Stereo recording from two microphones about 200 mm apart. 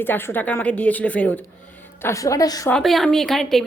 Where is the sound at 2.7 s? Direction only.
Centre (ahead or behind).